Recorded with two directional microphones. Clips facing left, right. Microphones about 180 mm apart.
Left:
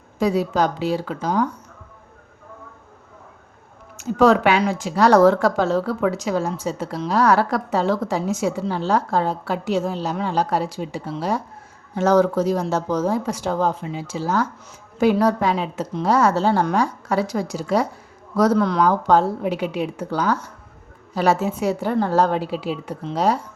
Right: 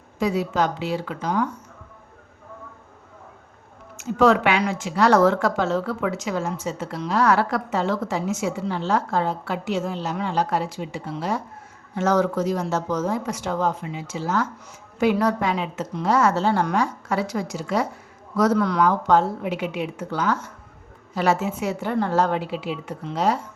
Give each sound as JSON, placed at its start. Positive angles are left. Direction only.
{"t": 0.2, "sound": "speech", "side_deg": 35}
{"t": 3.9, "sound": "speech", "side_deg": 35}